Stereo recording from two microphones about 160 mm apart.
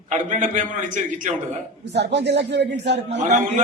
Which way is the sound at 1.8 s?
90° right.